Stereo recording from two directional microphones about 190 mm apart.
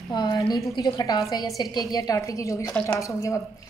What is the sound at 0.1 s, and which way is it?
A woman's voice, 20° left (ahead or behind).